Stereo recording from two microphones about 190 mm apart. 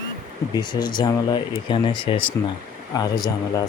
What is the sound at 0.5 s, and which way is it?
Speech, 25° left (ahead or behind).